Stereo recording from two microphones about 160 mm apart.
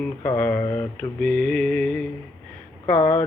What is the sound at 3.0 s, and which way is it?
Speech, 45° left (ahead or behind).